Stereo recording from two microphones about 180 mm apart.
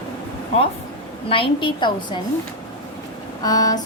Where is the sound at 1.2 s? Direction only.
30° left (ahead or behind).